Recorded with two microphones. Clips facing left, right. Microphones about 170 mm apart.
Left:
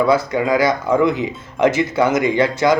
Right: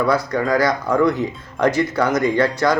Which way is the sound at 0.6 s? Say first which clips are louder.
Left 1 dB; 25° left (ahead or behind).